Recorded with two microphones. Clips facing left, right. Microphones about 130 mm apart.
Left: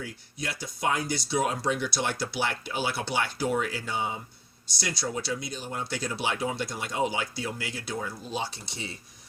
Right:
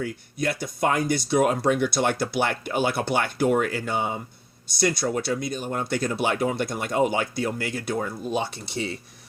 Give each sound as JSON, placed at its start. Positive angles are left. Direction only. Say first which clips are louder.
{"t": 0.0, "sound": "speech", "louder": "right 9 dB", "side_deg": -55}